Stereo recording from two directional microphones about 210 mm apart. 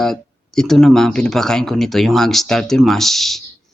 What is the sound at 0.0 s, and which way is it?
Speech, centre (ahead or behind).